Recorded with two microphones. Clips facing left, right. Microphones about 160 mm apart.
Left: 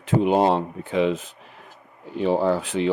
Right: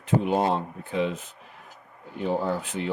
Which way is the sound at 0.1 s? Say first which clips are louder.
Left 5 dB; 90° left.